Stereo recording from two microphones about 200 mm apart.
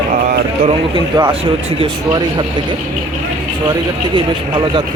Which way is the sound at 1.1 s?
25° right (ahead or behind).